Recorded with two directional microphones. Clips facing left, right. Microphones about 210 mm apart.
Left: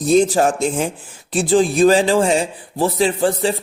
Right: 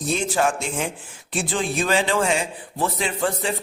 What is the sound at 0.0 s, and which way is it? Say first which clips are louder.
A man's voice: left 8 dB; 40° left (ahead or behind).